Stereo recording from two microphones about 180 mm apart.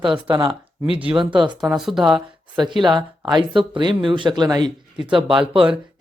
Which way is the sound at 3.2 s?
25° right (ahead or behind).